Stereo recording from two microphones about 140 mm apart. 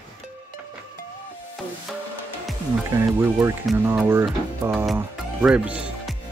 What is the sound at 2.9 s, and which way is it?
Speech, 20° right (ahead or behind).